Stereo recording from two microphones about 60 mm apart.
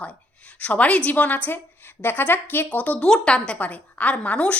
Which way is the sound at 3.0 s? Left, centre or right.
Centre.